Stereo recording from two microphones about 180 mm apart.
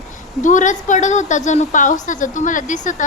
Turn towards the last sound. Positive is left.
turn(degrees=45)  # may be behind; listen again after turning